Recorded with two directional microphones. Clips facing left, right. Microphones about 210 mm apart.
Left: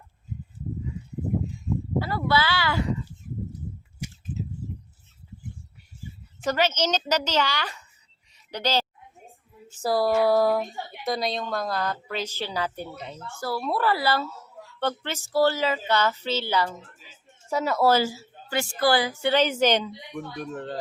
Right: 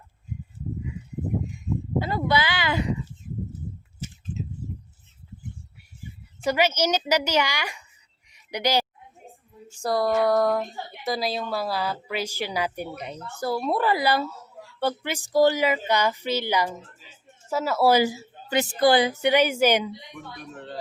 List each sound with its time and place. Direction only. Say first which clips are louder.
2.0 s speech: right 1 dB; 20° right (ahead or behind)
4.0 s a sound: left 1 dB; 10° left (ahead or behind)
6.4 s speech: right 2 dB; 10° right (ahead or behind)
8.3 s a sound: right 2 dB; 15° right (ahead or behind)
9.7 s speech: left 1 dB; 5° left (ahead or behind)
20.4 s speech: left 7 dB; 45° left (ahead or behind)